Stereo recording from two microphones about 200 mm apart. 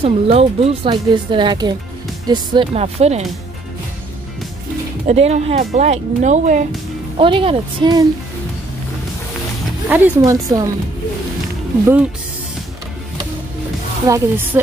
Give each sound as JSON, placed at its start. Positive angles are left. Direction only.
{"t": 0.0, "sound": "speech", "side_deg": -30}
{"t": 5.0, "sound": "speech", "side_deg": -35}
{"t": 7.2, "sound": "speech", "side_deg": -25}
{"t": 9.8, "sound": "speech", "side_deg": -10}
{"t": 14.0, "sound": "speech", "side_deg": -15}